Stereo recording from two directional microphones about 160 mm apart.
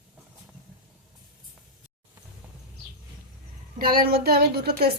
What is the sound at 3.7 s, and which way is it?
A woman's voice, 65° right (ahead or behind).